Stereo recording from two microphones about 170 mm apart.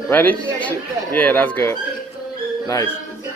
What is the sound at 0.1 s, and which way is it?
Speech, 10° left (ahead or behind).